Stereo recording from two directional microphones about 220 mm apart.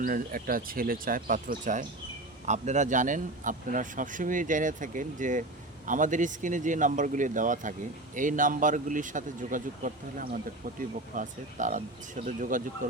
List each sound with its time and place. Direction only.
0.0 s a man's voice: 40° right (ahead or behind)